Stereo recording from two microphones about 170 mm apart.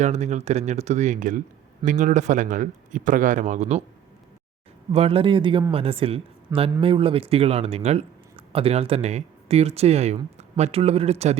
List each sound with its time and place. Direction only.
0.0 s speech: 40° right (ahead or behind)
4.9 s speech: 35° right (ahead or behind)